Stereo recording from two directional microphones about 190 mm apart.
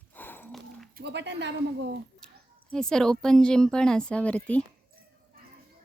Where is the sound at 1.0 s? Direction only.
65° right (ahead or behind).